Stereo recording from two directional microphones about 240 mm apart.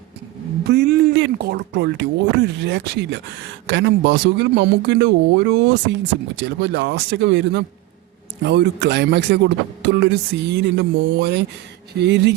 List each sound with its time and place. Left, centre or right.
0.7 s speech: right